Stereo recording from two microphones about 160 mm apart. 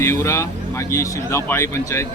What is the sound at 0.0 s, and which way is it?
Speech, 20° left (ahead or behind).